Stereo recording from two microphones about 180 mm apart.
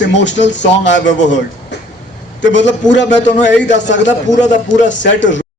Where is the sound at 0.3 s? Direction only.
80° left.